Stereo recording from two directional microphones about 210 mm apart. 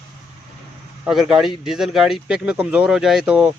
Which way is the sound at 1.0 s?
5° right (ahead or behind).